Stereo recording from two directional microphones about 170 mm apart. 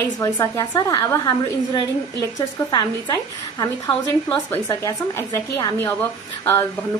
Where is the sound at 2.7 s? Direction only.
25° left (ahead or behind).